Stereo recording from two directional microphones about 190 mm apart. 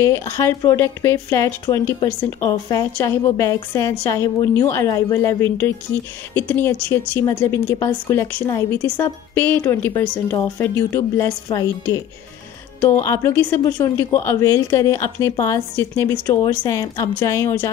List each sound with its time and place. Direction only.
0.0 s speech: 15° left (ahead or behind)